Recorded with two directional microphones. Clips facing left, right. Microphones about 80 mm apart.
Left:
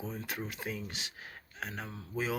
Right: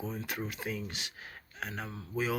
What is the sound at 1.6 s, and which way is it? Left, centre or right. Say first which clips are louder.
Speech: right 1 dB; right.